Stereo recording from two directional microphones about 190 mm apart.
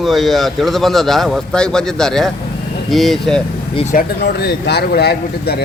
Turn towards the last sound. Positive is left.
turn(degrees=55)  # may be behind; listen again after turning